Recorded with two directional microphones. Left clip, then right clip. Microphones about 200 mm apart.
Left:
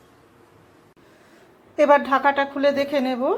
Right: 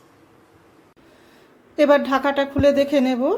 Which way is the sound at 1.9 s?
20° right (ahead or behind).